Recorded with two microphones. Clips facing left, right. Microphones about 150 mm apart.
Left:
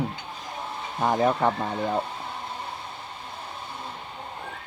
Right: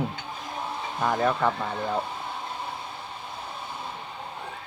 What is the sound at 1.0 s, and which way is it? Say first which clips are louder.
Speech: left 2 dB; 25° left (ahead or behind).